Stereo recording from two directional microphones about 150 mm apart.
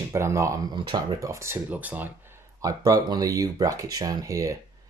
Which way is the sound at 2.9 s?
25° right (ahead or behind).